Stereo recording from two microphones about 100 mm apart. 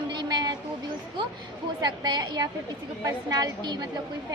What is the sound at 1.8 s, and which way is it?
A woman's voice, 45° right (ahead or behind).